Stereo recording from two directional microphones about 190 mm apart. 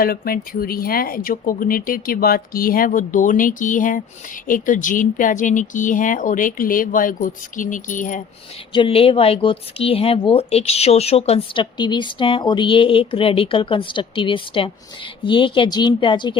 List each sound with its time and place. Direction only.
0.0 s speech: 50° left (ahead or behind)
8.7 s speech: 30° left (ahead or behind)